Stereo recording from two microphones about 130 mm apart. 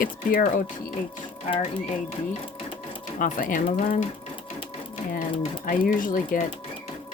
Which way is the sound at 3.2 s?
85° left.